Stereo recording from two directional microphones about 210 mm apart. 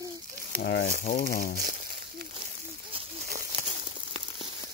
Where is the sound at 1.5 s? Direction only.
45° right (ahead or behind).